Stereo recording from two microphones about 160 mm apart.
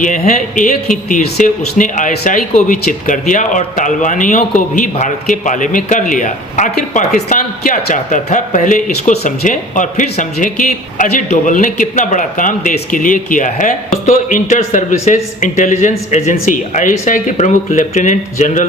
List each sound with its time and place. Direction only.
0.0 s speech: 55° left (ahead or behind)